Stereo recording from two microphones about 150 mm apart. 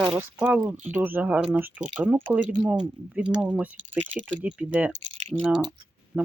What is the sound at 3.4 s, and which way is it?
Speech, 10° right (ahead or behind).